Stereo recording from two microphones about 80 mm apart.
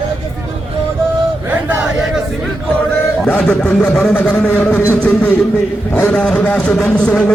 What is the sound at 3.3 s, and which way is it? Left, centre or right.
Speech, centre.